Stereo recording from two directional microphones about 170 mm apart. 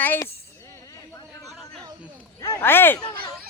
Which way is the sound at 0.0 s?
10° left (ahead or behind).